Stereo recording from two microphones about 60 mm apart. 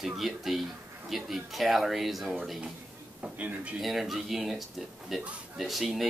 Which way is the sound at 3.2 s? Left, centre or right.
Right.